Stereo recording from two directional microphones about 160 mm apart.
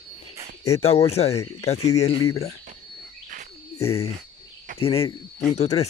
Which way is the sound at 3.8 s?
40° left (ahead or behind).